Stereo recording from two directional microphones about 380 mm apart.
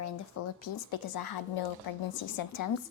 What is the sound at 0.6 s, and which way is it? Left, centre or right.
A woman's voice, left.